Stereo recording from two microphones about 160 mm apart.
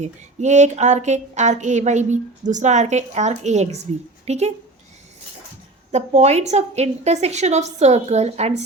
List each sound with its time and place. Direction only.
0.0 s speech: 45° right (ahead or behind)
5.9 s speech: 45° right (ahead or behind)